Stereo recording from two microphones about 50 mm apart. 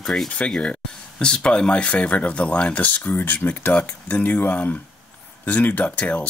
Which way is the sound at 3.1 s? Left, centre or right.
Left.